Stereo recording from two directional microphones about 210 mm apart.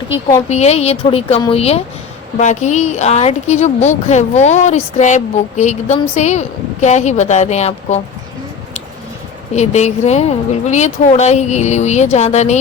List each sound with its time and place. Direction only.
0.4 s a woman's voice: 30° left (ahead or behind)
9.6 s a woman's voice: 35° left (ahead or behind)